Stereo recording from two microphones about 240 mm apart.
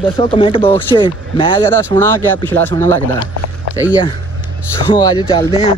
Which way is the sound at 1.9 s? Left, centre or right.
Centre.